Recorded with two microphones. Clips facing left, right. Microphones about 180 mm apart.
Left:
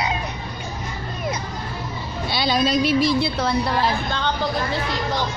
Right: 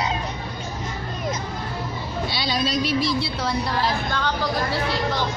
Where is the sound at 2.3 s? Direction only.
50° left (ahead or behind).